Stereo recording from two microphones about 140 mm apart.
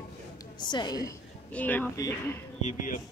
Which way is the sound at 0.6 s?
30° left (ahead or behind).